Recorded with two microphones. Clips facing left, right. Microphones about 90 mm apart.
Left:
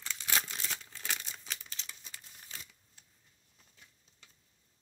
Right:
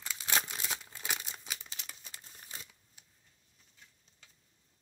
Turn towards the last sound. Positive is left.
turn(degrees=-20)  # may be behind; listen again after turning